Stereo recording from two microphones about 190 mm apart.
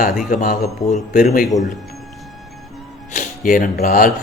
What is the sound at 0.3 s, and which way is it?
Speech, 45° left (ahead or behind).